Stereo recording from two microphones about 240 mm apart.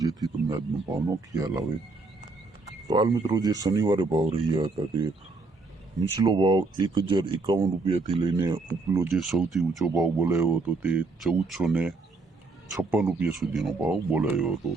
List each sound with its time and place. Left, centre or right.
0.0 s speech: centre
2.8 s speech: centre
9.1 s speech: centre
9.9 s speech: centre